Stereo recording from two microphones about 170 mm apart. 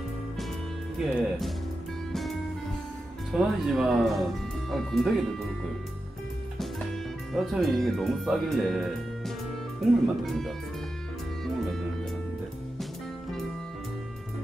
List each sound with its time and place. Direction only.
0.9 s speech: centre (ahead or behind)
3.3 s speech: centre (ahead or behind)
7.3 s speech: centre (ahead or behind)
11.4 s music: centre (ahead or behind)